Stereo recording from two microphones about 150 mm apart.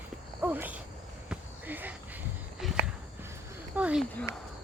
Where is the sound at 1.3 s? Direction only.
10° right (ahead or behind).